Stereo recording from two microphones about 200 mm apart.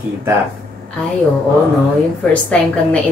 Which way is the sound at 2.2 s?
5° left (ahead or behind).